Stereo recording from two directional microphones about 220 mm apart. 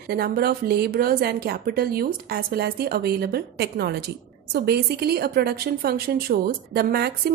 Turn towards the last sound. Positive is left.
turn(degrees=-45)  # may be behind; listen again after turning